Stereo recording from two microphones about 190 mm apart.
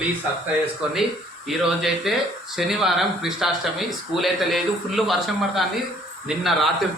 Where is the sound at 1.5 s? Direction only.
Centre (ahead or behind).